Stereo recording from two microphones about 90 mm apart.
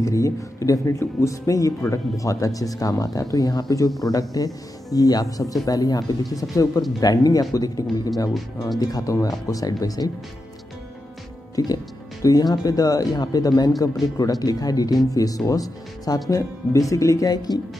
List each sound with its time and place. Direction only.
0.0 s speech: 35° left (ahead or behind)
11.5 s speech: 40° left (ahead or behind)